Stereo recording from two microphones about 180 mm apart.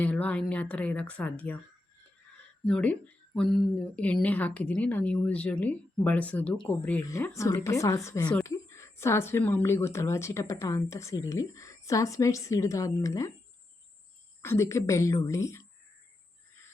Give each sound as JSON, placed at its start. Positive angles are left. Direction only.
{"t": 0.0, "sound": "speech", "side_deg": 10}
{"t": 2.6, "sound": "speech", "side_deg": 5}
{"t": 14.4, "sound": "speech", "side_deg": 15}